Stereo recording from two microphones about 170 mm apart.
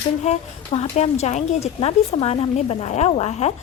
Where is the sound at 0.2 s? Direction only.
40° left (ahead or behind).